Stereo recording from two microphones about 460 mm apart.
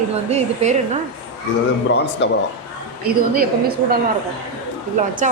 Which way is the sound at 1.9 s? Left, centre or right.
Left.